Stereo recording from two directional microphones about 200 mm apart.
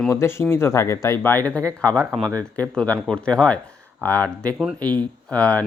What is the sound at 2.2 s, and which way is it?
Speech, 20° right (ahead or behind).